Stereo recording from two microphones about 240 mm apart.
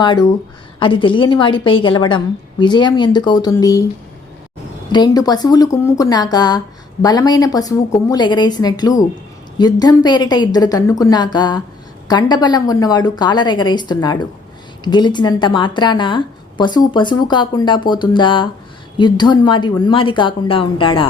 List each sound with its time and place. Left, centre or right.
0.0 s a woman's voice: centre
4.9 s a woman's voice: centre